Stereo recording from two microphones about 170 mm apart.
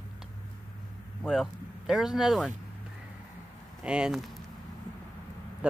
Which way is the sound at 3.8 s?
5° right (ahead or behind).